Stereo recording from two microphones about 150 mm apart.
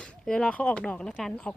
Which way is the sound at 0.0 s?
5° left (ahead or behind).